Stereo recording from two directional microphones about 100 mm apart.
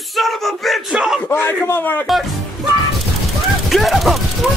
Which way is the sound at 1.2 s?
20° left (ahead or behind).